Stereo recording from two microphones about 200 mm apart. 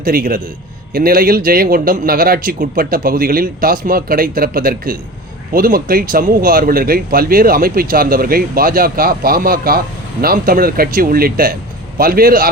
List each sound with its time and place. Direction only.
0.0 s speech: 45° right (ahead or behind)